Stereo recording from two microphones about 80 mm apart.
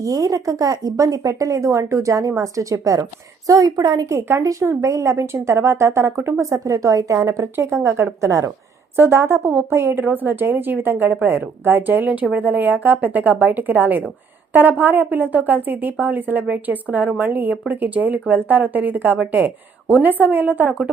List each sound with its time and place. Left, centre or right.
0.0 s speech: right
4.1 s a woman's voice: right
6.5 s speech: right
7.5 s a woman's voice: right